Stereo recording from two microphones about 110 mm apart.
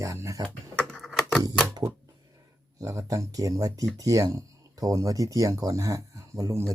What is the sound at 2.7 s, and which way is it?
Speech, 30° right (ahead or behind).